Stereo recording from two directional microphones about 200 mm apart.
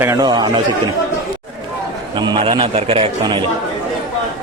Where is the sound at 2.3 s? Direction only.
25° right (ahead or behind).